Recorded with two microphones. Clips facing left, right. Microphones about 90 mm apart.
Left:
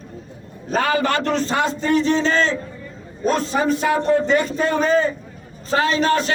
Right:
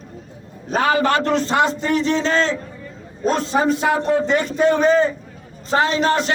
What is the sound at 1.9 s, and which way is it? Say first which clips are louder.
Speech: left 1 dB; 40° left (ahead or behind).